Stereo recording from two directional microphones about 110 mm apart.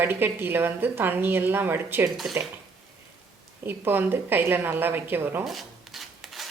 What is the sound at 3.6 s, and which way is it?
A woman's voice, 20° right (ahead or behind).